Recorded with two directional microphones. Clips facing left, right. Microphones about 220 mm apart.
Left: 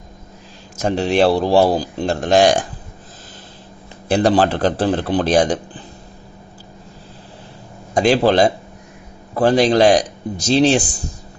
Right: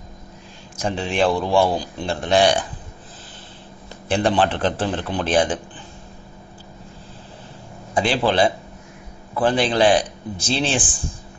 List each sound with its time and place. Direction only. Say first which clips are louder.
0.7 s a man's voice: left 6 dB; 40° left (ahead or behind)
4.1 s a man's voice: left 4 dB; 40° left (ahead or behind)
7.9 s a man's voice: left 6 dB; 40° left (ahead or behind)